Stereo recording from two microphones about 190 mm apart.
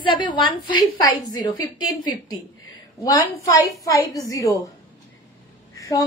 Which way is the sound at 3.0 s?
15° left (ahead or behind).